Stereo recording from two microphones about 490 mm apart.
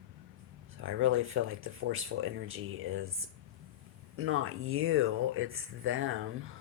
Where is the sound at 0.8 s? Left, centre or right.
Right.